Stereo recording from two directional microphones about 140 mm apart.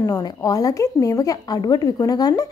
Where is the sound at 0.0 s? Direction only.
25° left (ahead or behind).